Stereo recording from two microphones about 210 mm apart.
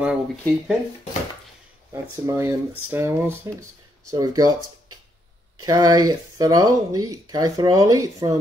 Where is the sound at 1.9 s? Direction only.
15° right (ahead or behind).